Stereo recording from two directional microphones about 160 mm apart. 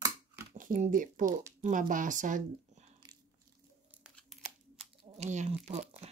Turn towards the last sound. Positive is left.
turn(degrees=-45)  # may be behind; listen again after turning